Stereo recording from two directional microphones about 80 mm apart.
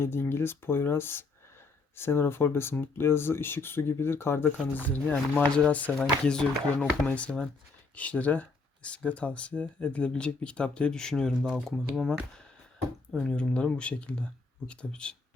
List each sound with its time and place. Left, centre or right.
0.0 s speech: left
4.4 s speech: left; by 12.1 s centre
13.1 s speech: centre